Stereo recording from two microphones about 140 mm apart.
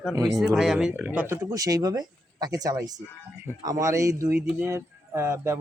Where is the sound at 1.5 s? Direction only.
25° right (ahead or behind).